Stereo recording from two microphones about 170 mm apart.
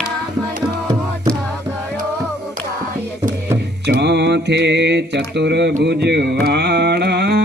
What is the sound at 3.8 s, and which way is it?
Mantra, 90° right.